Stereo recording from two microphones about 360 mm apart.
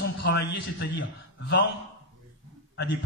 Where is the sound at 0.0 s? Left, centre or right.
Left.